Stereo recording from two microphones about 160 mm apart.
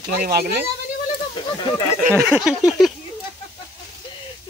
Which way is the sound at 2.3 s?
5° right (ahead or behind).